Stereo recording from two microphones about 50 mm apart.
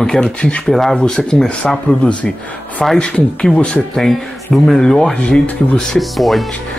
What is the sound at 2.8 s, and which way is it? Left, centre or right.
Speech, centre.